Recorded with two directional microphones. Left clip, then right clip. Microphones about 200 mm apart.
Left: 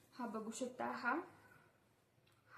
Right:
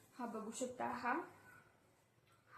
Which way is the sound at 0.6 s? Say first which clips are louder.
Right 2 dB; 25° left (ahead or behind).